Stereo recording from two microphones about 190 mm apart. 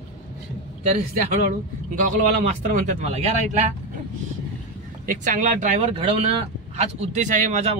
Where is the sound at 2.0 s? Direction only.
45° right (ahead or behind).